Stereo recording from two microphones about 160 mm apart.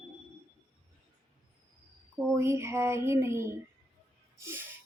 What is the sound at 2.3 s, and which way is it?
Speech, 15° right (ahead or behind).